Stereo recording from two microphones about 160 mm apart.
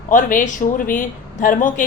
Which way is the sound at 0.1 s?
55° left (ahead or behind).